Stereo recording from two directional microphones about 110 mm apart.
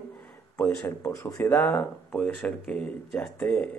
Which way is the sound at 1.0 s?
30° left (ahead or behind).